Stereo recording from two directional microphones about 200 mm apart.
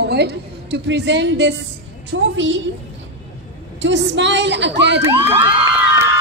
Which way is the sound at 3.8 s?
65° right (ahead or behind).